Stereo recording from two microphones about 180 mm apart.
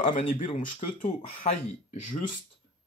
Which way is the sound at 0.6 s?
45° left (ahead or behind).